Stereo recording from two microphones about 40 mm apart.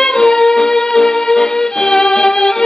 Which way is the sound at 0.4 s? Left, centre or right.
Centre.